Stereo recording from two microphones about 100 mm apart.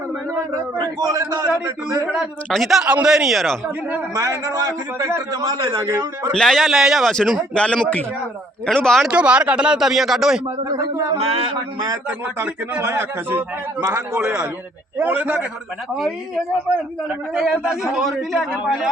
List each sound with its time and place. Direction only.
1.0 s a man's voice: 35° right (ahead or behind)
2.5 s a man's voice: centre (ahead or behind)
4.1 s a man's voice: 35° right (ahead or behind)
5.8 s speech: 30° right (ahead or behind)
6.3 s a man's voice: 5° left (ahead or behind)
9.0 s speech: 10° right (ahead or behind)
10.7 s a man's voice: 35° right (ahead or behind)
11.2 s speech: 70° right (ahead or behind)
11.5 s a man's voice: 40° right (ahead or behind)
12.8 s a man's voice: 25° right (ahead or behind)
14.2 s speech: 15° right (ahead or behind)
17.1 s a man's voice: centre (ahead or behind)